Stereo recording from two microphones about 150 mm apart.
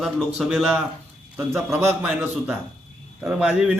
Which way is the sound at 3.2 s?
5° right (ahead or behind).